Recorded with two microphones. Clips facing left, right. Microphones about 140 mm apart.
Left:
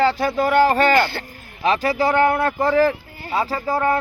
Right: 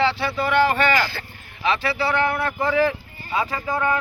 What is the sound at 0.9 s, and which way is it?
Speech, 55° left (ahead or behind).